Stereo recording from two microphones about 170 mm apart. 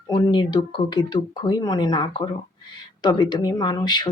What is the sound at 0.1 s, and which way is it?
Speech, 25° left (ahead or behind).